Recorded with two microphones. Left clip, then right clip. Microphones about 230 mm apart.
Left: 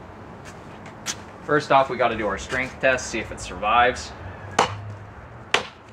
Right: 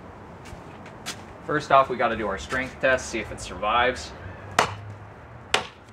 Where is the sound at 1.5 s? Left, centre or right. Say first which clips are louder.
Left 1 dB; left.